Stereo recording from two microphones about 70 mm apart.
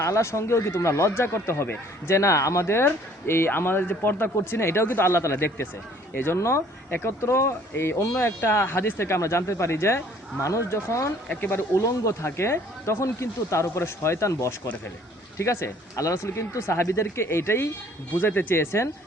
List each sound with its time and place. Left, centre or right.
0.0 s speech: left
11.3 s speech: left
11.7 s speech: left